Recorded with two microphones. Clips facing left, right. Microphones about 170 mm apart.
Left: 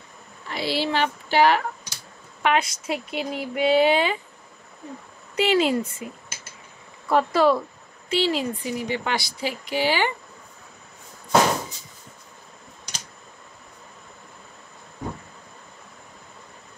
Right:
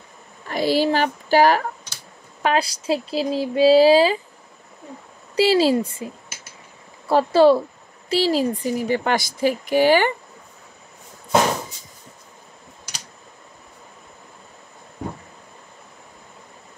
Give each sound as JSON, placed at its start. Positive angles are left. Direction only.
{"t": 0.5, "sound": "speech", "side_deg": -45}
{"t": 5.3, "sound": "speech", "side_deg": -35}
{"t": 7.1, "sound": "a woman's voice", "side_deg": -30}